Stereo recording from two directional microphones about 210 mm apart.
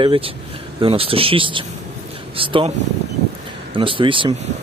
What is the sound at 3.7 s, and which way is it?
Speech, 25° right (ahead or behind).